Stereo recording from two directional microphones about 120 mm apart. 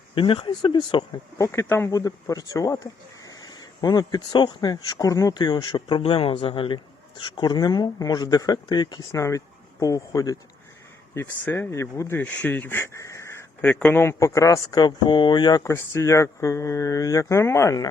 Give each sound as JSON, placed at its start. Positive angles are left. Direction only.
{"t": 0.1, "sound": "speech", "side_deg": 45}
{"t": 1.4, "sound": "speech", "side_deg": 20}
{"t": 6.0, "sound": "speech", "side_deg": 50}
{"t": 13.7, "sound": "speech", "side_deg": 10}
{"t": 14.0, "sound": "speech", "side_deg": 20}